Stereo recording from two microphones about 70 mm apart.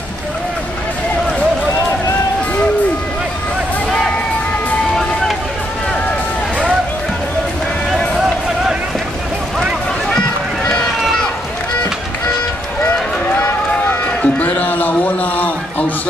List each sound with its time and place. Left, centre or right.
10.7 s run: centre
12.8 s run: centre